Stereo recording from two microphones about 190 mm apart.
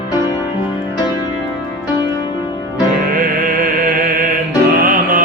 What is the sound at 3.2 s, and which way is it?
Music, 45° right (ahead or behind).